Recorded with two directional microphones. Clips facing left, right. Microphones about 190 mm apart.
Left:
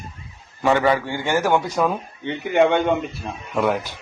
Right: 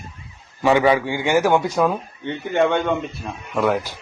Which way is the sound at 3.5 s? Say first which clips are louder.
Right 1 dB; centre (ahead or behind).